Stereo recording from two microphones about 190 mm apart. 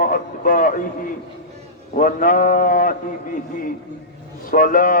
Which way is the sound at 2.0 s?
45° left (ahead or behind).